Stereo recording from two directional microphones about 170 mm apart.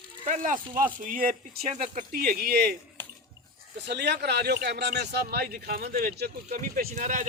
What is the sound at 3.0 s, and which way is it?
Bathtub, 10° left (ahead or behind).